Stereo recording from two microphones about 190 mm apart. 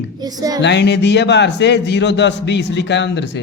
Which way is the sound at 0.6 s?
65° left (ahead or behind).